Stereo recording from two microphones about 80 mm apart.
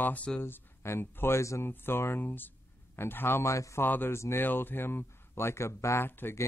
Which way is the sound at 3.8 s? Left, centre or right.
Left.